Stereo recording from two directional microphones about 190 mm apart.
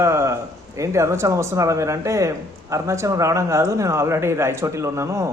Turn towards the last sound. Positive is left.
turn(degrees=-15)  # may be behind; listen again after turning